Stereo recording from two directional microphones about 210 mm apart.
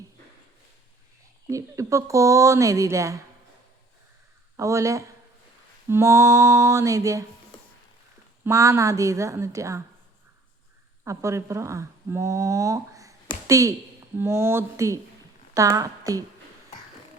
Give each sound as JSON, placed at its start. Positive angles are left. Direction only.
{"t": 1.5, "sound": "speech", "side_deg": -15}
{"t": 4.5, "sound": "speech", "side_deg": -15}
{"t": 8.4, "sound": "speech", "side_deg": -15}
{"t": 11.0, "sound": "speech", "side_deg": -15}